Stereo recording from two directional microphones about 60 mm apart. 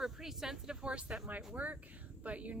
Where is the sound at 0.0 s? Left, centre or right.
Centre.